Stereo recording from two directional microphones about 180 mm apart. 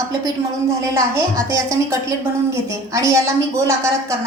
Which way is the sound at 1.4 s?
15° right (ahead or behind).